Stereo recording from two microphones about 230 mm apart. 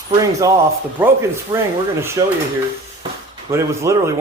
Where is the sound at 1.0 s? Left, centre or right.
Centre.